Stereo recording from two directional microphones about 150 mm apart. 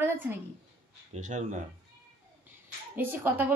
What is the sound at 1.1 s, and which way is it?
Speech, 55° right (ahead or behind).